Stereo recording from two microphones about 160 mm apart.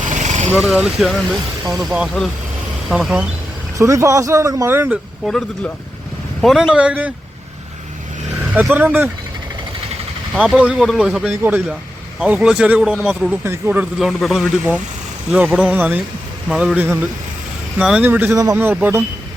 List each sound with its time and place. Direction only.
0.0 s vehicle: 50° right (ahead or behind)
0.5 s speech: 5° right (ahead or behind)
3.8 s speech: 20° right (ahead or behind)
5.2 s speech: 5° left (ahead or behind)
8.5 s speech: 10° right (ahead or behind)
10.3 s speech: 5° right (ahead or behind)